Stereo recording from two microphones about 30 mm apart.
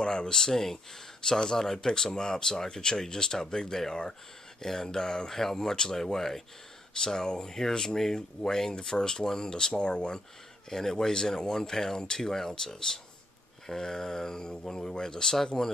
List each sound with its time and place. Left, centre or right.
0.0 s speech: left
10.7 s speech: centre